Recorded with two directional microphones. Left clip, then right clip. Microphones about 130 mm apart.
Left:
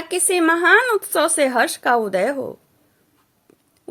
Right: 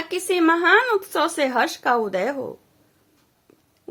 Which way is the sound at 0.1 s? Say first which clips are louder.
Left 2 dB; 20° left (ahead or behind).